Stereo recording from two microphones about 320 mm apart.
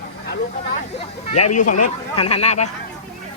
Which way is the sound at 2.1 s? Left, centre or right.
Centre.